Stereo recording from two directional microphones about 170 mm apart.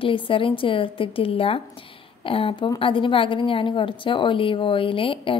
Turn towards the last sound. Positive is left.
turn(degrees=30)  # may be behind; listen again after turning